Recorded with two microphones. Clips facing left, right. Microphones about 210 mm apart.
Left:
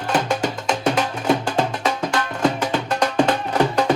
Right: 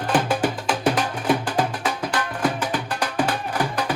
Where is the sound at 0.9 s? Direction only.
25° left (ahead or behind).